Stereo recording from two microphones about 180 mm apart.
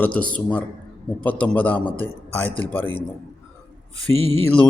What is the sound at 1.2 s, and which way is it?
Speech, 10° left (ahead or behind).